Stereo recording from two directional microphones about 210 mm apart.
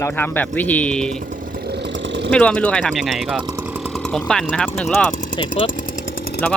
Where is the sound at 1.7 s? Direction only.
55° right (ahead or behind).